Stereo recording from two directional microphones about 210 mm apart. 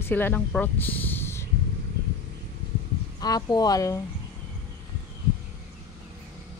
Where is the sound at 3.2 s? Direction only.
20° left (ahead or behind).